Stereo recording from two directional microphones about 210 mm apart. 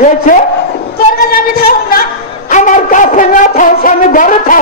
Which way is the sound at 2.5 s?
35° left (ahead or behind).